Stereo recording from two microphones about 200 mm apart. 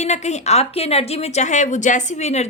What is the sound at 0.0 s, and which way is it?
A woman's voice, 35° left (ahead or behind).